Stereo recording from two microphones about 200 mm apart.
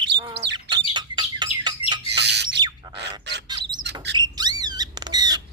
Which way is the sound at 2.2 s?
60° right (ahead or behind).